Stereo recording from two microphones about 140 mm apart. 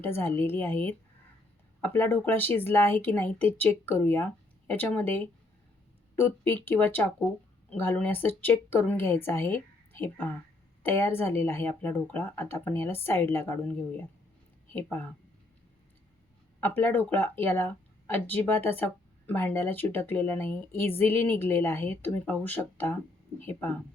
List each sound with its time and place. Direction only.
0.0 s speech: 15° left (ahead or behind)
16.6 s speech: 15° left (ahead or behind)